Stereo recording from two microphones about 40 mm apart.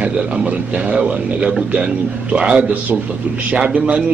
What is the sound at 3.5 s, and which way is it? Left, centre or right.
Speech, right.